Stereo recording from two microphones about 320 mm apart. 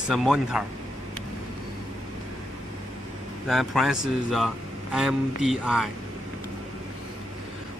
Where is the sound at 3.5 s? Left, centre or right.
Centre.